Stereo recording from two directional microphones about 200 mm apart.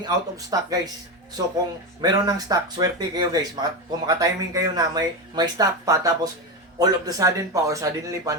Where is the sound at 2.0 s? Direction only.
20° right (ahead or behind).